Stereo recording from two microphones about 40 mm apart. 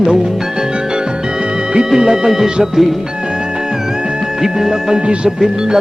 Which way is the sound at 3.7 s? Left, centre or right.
Centre.